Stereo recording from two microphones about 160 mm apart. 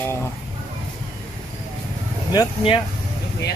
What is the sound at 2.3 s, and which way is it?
Speech, 25° left (ahead or behind).